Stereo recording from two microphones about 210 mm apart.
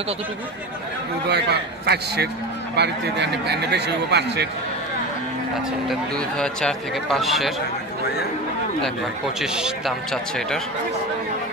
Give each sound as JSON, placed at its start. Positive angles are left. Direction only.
{"t": 1.3, "sound": "speech", "side_deg": -50}
{"t": 5.9, "sound": "speech", "side_deg": 5}
{"t": 9.4, "sound": "speech", "side_deg": -5}